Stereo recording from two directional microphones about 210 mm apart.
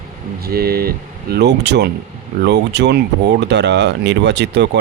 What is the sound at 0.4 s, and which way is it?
Speech, 45° right (ahead or behind).